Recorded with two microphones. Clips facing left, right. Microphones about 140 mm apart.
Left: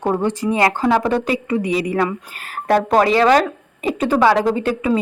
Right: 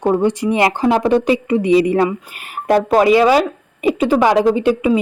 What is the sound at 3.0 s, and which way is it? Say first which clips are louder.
Speech: right 3 dB; 15° right (ahead or behind).